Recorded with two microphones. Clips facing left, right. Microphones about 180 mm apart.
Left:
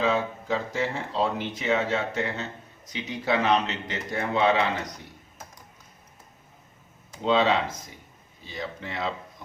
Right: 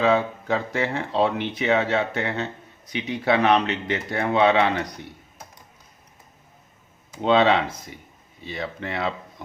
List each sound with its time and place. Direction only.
0.0 s speech: 65° right (ahead or behind)
7.2 s speech: 65° right (ahead or behind)